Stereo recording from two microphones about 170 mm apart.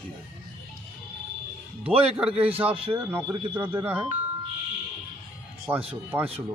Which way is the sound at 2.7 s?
35° right (ahead or behind).